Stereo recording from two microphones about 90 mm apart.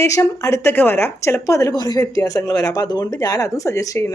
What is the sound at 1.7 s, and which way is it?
Speech, 50° left (ahead or behind).